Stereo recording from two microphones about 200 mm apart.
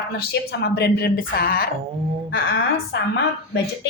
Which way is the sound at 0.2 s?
55° left (ahead or behind).